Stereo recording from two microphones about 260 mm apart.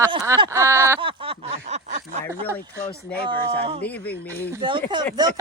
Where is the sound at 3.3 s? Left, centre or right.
Centre.